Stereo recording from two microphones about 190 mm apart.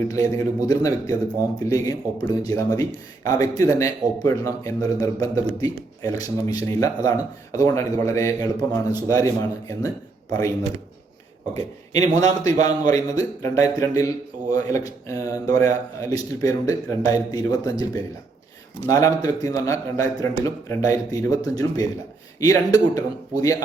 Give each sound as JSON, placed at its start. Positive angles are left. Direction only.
{"t": 0.1, "sound": "a man's voice", "side_deg": 20}
{"t": 11.5, "sound": "speech", "side_deg": 20}